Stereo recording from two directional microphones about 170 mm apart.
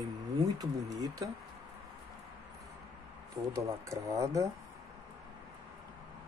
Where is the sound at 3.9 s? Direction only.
20° right (ahead or behind).